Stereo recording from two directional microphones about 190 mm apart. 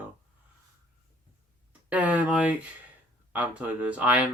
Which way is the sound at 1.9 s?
10° right (ahead or behind).